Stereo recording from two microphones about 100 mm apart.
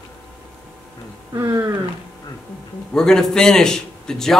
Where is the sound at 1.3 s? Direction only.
30° right (ahead or behind).